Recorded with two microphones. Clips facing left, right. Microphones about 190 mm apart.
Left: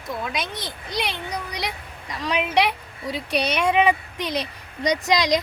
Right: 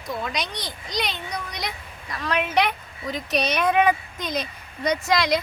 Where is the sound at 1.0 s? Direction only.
10° left (ahead or behind).